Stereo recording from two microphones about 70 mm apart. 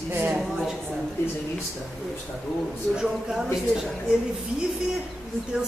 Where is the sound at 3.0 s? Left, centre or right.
Centre.